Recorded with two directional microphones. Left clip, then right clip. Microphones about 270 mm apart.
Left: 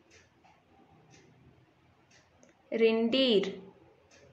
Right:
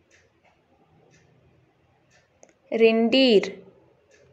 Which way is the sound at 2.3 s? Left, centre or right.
Right.